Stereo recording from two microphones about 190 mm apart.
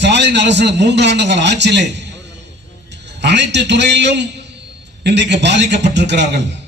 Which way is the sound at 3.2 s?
65° right (ahead or behind).